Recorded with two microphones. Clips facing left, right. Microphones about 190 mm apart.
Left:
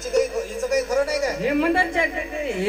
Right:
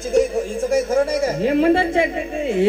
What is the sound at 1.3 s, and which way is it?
Music, 35° right (ahead or behind).